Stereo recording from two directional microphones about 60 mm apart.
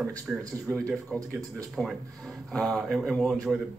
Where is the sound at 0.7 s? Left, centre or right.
Right.